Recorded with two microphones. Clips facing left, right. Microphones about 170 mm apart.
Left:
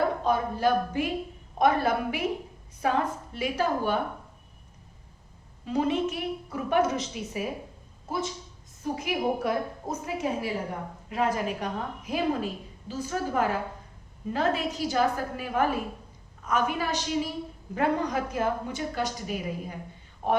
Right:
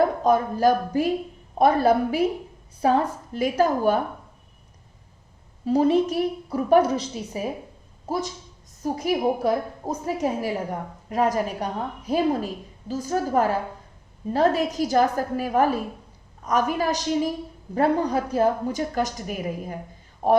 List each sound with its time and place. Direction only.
0.3 s a woman's voice: 40° right (ahead or behind)
5.6 s a woman's voice: 35° right (ahead or behind)